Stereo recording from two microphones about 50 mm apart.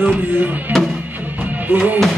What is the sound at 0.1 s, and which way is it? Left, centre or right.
Speech, right.